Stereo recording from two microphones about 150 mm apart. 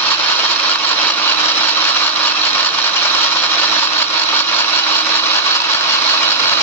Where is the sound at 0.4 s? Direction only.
15° left (ahead or behind).